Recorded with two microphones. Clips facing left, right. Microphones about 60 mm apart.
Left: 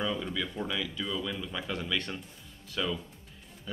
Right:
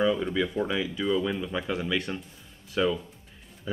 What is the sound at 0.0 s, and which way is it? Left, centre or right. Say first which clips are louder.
Speech: right 8 dB; centre.